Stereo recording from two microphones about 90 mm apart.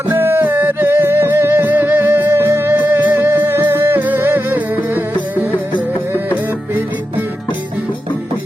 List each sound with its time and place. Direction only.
0.1 s music: 25° right (ahead or behind)